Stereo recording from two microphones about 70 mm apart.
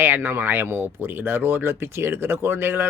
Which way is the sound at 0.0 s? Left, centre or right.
Right.